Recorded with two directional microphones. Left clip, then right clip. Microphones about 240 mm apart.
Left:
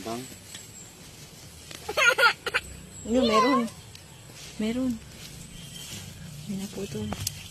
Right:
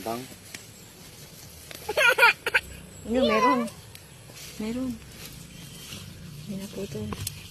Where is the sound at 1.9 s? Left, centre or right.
Centre.